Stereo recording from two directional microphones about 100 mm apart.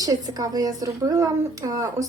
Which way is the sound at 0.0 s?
40° right (ahead or behind).